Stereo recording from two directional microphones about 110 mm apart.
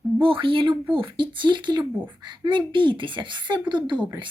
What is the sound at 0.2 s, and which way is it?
Speech, 55° right (ahead or behind).